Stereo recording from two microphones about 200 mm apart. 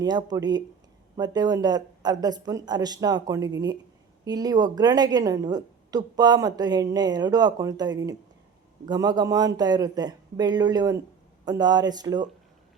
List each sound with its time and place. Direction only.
0.0 s a woman's voice: 20° right (ahead or behind)